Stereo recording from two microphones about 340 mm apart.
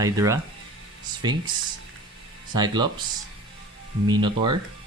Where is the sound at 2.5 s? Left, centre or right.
Centre.